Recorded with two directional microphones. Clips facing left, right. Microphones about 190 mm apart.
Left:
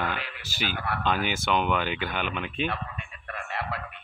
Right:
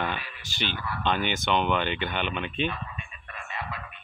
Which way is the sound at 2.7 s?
70° left (ahead or behind).